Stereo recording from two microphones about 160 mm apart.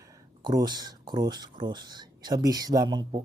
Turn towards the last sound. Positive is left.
turn(degrees=-25)  # may be behind; listen again after turning